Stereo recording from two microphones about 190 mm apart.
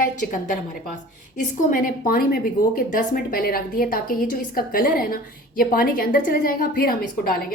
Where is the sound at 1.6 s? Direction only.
45° left (ahead or behind).